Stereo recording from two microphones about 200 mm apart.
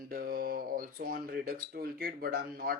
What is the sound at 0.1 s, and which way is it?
Speech, 50° right (ahead or behind).